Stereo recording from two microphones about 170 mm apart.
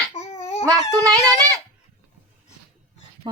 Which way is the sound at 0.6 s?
20° right (ahead or behind).